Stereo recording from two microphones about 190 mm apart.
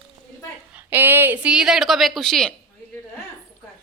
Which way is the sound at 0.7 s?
10° right (ahead or behind).